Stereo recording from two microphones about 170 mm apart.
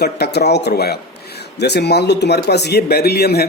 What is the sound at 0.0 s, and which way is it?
Speech, 75° left (ahead or behind).